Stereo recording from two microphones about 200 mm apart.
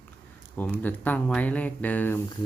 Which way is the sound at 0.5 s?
10° left (ahead or behind).